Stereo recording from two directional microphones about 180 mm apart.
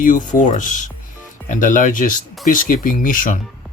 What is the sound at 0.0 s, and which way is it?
Speech, 45° left (ahead or behind).